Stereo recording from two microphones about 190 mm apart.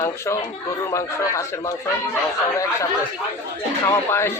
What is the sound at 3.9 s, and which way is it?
Speech, 15° left (ahead or behind).